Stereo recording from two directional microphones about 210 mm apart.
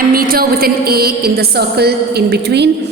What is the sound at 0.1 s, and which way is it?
A woman's voice, 45° right (ahead or behind).